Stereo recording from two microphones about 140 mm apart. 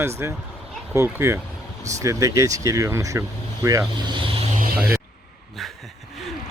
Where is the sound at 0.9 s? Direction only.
20° right (ahead or behind).